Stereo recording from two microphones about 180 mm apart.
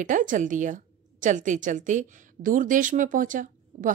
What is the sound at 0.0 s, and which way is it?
A woman's voice, 45° right (ahead or behind).